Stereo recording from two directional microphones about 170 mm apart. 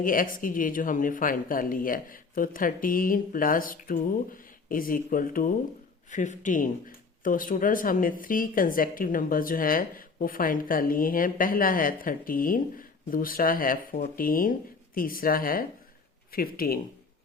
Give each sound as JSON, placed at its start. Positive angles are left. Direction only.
{"t": 0.0, "sound": "speech", "side_deg": 55}